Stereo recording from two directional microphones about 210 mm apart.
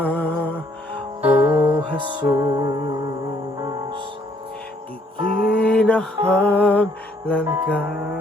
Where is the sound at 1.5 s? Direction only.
10° right (ahead or behind).